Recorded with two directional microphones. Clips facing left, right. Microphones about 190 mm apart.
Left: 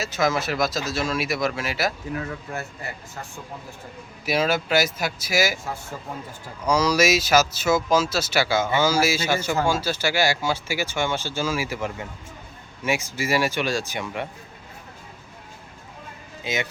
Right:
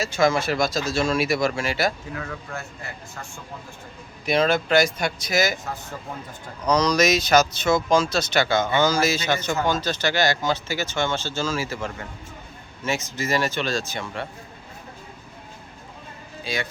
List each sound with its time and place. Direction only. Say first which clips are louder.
0.0 s speech: right 3 dB; centre (ahead or behind)
4.3 s speech: right 2 dB; 5° left (ahead or behind)
6.7 s speech: even; 5° left (ahead or behind)
16.4 s speech: left 1 dB; 20° left (ahead or behind)